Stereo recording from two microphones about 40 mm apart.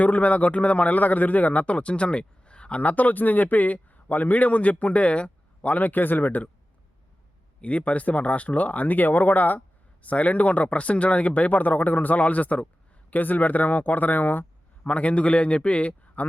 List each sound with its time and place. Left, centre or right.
0.0 s speech: left
2.8 s a man's voice: left
7.6 s a man's voice: left
14.8 s speech: left